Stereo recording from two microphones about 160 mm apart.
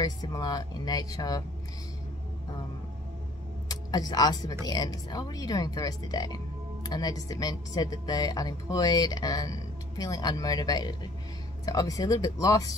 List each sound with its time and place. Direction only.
0.0 s speech: 25° left (ahead or behind)
3.6 s speech: 25° left (ahead or behind)